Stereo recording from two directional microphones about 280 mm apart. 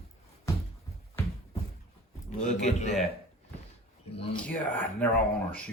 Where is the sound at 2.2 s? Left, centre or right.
Left.